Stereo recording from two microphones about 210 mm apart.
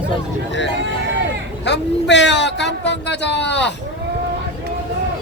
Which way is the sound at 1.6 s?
55° left (ahead or behind).